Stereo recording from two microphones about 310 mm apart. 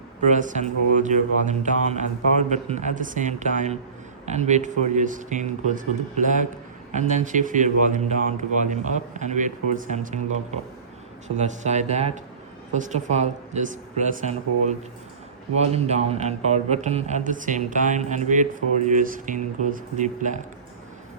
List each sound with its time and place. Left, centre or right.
0.3 s speech: right